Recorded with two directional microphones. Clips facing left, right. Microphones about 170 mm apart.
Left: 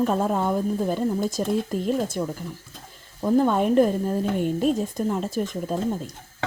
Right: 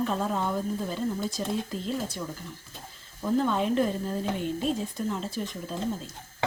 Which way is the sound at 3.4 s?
50° left (ahead or behind).